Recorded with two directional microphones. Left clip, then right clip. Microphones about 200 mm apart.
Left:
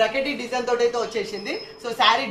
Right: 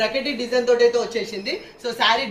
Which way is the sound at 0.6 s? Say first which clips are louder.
Right 5 dB; 20° left (ahead or behind).